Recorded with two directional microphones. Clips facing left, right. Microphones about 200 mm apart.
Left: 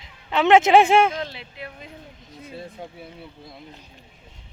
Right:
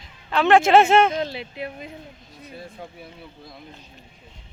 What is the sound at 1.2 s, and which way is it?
Speech, 15° right (ahead or behind).